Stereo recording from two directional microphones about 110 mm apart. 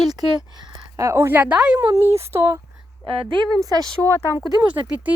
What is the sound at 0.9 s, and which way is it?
Speech, 25° right (ahead or behind).